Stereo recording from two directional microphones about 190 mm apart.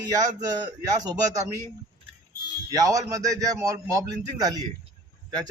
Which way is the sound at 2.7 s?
15° right (ahead or behind).